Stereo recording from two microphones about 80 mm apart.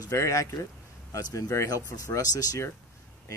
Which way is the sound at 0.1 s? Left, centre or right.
Left.